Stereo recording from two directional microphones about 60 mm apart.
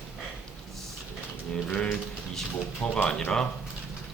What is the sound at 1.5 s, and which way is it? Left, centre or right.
Mechanisms, centre.